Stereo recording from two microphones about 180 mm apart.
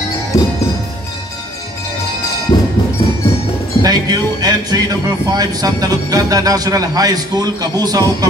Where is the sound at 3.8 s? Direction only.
20° right (ahead or behind).